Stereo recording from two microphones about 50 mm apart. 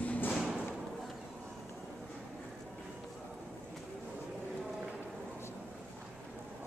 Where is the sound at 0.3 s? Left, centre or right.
Centre.